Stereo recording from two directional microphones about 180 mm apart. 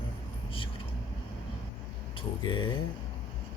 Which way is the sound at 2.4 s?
25° left (ahead or behind).